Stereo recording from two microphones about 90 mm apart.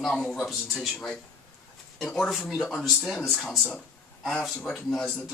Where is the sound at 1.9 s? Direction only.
Centre (ahead or behind).